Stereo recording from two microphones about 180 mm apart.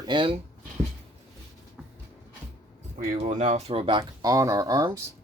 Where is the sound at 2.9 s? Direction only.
40° right (ahead or behind).